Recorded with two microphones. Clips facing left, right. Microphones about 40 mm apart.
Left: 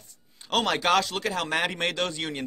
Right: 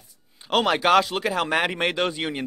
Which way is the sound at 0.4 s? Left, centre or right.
Centre.